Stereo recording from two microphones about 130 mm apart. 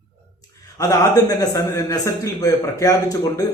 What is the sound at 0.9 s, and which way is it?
Speech, 25° left (ahead or behind).